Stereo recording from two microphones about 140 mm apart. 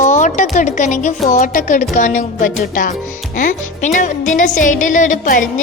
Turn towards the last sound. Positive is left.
turn(degrees=65)  # may be behind; listen again after turning